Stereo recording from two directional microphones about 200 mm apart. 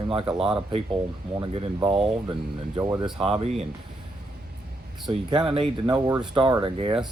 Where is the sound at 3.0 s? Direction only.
Centre (ahead or behind).